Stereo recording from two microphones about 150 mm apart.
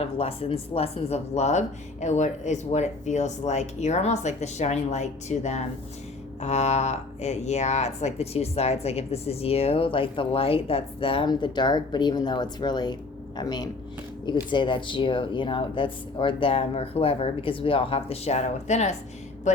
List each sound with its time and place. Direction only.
0.0 s speech: 40° left (ahead or behind)